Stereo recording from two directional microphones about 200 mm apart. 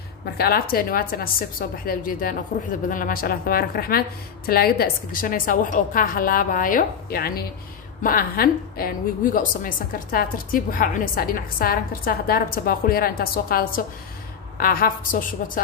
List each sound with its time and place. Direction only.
0.4 s a woman's voice: 50° left (ahead or behind)